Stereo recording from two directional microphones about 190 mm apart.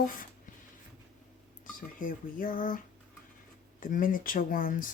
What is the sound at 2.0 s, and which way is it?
Speech, 45° left (ahead or behind).